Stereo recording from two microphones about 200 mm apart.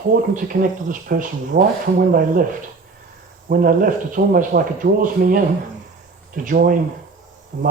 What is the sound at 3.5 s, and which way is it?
Speech, 45° right (ahead or behind).